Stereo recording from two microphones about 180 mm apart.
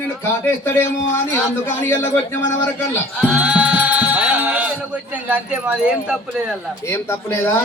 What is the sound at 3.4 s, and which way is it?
Music, 10° right (ahead or behind).